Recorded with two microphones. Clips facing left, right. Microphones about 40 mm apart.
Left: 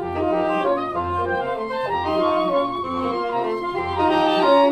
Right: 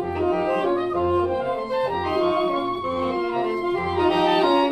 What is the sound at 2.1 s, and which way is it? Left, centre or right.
Music, centre.